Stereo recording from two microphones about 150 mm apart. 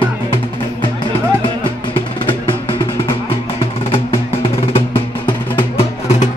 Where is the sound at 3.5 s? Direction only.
35° left (ahead or behind).